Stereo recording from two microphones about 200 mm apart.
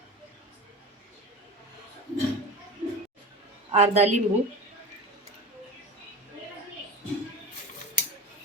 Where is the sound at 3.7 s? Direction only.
35° right (ahead or behind).